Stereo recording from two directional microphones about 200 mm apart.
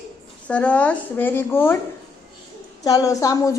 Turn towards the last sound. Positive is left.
turn(degrees=15)  # may be behind; listen again after turning